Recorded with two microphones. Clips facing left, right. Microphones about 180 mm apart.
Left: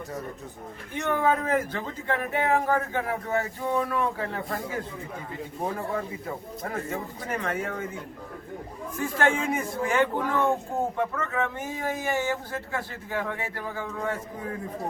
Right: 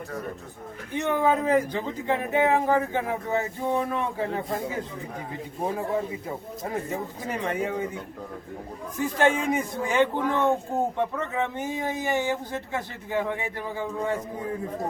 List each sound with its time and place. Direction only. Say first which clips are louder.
0.9 s speech: right 2 dB; 15° right (ahead or behind)
5.7 s speech: right 3 dB; 15° right (ahead or behind)
9.1 s speech: right 2 dB; 20° right (ahead or behind)